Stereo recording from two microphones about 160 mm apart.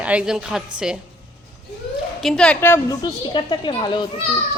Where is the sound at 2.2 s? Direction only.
5° left (ahead or behind).